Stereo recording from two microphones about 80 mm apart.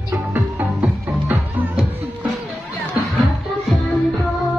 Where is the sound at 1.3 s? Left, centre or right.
Right.